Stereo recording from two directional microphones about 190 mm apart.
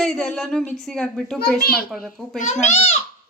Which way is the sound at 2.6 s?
35° left (ahead or behind).